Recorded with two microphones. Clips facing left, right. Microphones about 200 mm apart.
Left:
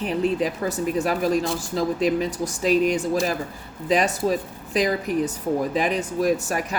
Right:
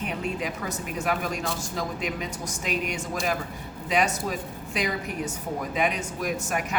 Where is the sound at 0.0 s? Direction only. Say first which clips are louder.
Left 8 dB; 30° left (ahead or behind).